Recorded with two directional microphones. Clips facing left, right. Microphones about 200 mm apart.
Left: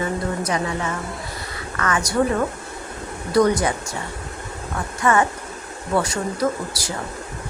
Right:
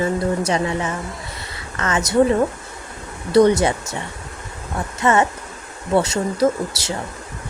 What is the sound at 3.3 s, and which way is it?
Speech, 25° right (ahead or behind).